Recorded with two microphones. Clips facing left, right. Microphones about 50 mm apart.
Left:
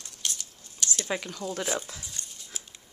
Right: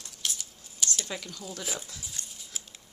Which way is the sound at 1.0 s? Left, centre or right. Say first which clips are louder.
Left 6 dB; left.